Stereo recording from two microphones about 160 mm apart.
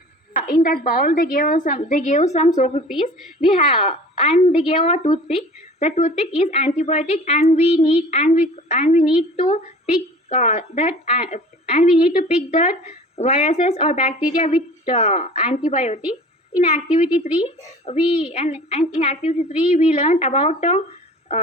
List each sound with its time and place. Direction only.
0.5 s a woman's voice: 60° left (ahead or behind)
3.8 s a woman's voice: 45° left (ahead or behind)